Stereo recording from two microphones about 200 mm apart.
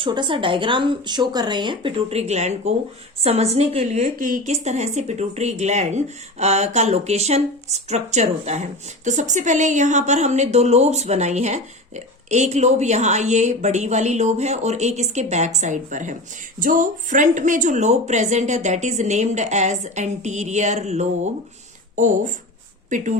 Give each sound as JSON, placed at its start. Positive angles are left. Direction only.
{"t": 0.0, "sound": "a woman's voice", "side_deg": -25}